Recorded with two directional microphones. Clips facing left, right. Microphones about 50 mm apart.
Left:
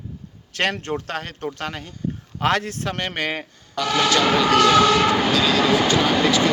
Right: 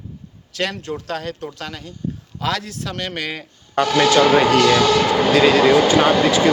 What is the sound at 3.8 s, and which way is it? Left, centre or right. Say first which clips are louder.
Speech: right 3 dB; centre.